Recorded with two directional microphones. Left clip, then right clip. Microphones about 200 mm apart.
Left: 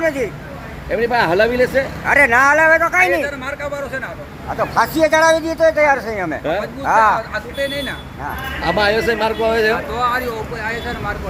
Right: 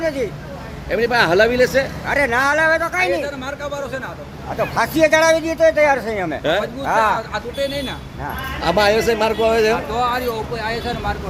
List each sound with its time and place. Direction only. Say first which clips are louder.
0.0 s speech: left 3 dB; 5° left (ahead or behind)
3.2 s speech: left 2 dB; 25° right (ahead or behind)
4.7 s a man's voice: left 1 dB; centre (ahead or behind)
7.3 s speech: left 1 dB; 35° right (ahead or behind)
8.2 s a man's voice: even; 15° right (ahead or behind)
9.9 s speech: left 1 dB; 30° right (ahead or behind)